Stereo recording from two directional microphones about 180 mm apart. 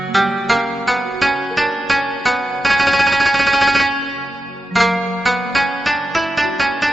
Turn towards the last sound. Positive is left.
turn(degrees=0)  # may be behind; listen again after turning